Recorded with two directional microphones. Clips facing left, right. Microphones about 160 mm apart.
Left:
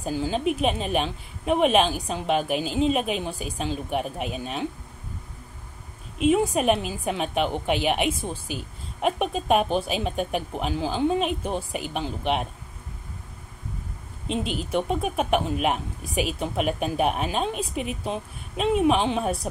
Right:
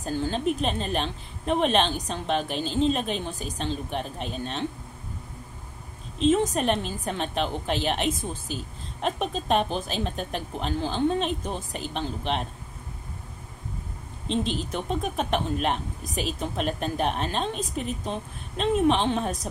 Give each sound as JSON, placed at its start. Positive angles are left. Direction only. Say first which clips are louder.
{"t": 0.0, "sound": "a woman's voice", "louder": "left 1 dB", "side_deg": 10}
{"t": 6.1, "sound": "a woman's voice", "louder": "left 1 dB", "side_deg": 10}
{"t": 14.2, "sound": "a woman's voice", "louder": "right 1 dB", "side_deg": 5}